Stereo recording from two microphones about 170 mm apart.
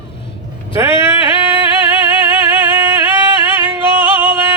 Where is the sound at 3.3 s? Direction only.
15° right (ahead or behind).